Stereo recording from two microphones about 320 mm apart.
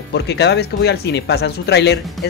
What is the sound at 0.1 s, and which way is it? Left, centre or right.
Speech, left.